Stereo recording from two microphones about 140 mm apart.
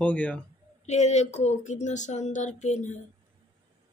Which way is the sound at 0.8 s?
55° left (ahead or behind).